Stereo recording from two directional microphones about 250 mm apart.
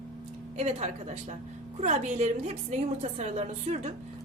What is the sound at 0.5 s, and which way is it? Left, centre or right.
A woman's voice, right.